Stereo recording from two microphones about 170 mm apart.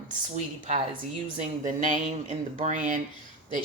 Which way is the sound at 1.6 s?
45° right (ahead or behind).